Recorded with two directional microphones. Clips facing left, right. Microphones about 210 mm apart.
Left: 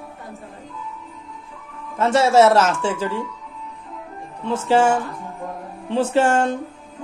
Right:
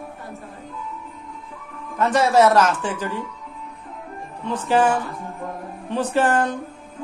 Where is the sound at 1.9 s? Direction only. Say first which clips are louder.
Left 2 dB; 25° left (ahead or behind).